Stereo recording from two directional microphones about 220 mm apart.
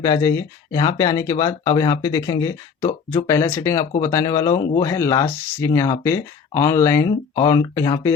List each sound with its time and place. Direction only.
0.0 s speech: 15° left (ahead or behind)